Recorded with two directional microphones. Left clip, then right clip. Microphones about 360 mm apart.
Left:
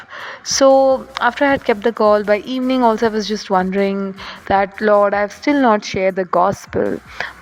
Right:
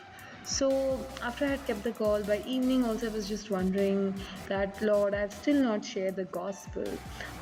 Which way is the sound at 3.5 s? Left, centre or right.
Left.